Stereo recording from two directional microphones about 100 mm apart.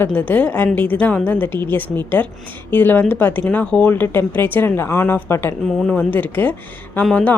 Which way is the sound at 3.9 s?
20° left (ahead or behind).